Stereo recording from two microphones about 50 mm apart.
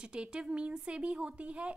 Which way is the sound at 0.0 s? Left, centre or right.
Centre.